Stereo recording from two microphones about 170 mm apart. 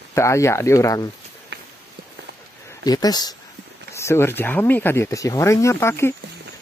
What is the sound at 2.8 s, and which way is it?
Speech, 20° left (ahead or behind).